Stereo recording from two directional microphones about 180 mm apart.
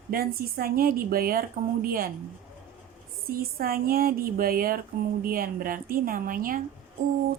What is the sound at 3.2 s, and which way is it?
A woman's voice, 55° right (ahead or behind).